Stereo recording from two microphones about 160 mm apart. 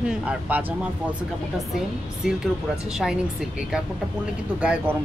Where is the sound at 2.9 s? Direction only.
5° right (ahead or behind).